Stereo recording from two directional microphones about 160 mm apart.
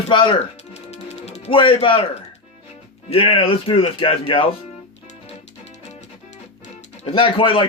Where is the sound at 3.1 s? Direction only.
35° left (ahead or behind).